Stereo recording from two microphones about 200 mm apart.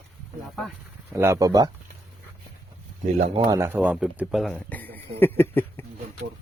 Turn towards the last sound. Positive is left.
turn(degrees=10)  # may be behind; listen again after turning